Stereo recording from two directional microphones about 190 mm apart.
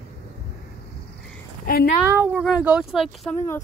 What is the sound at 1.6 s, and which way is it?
Speech, 50° left (ahead or behind).